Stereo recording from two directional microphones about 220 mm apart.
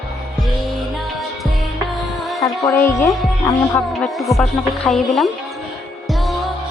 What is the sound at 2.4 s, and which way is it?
Music, 10° left (ahead or behind).